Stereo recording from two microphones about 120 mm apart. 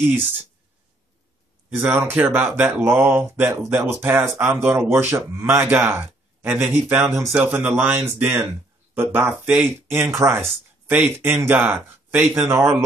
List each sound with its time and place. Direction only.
1.8 s a man's voice: 15° right (ahead or behind)